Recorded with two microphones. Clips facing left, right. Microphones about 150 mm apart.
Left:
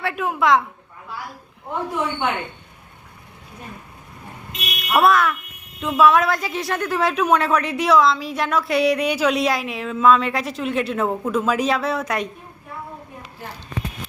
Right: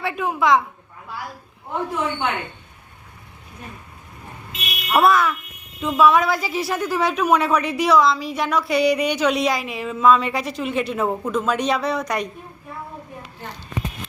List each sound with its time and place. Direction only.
0.0 s a woman's voice: centre (ahead or behind)
4.5 s a woman's voice: centre (ahead or behind)